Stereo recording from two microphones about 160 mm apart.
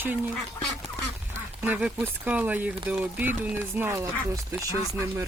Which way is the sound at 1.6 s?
10° right (ahead or behind).